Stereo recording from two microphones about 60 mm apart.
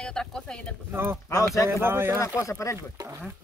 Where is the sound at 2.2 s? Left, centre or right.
Left.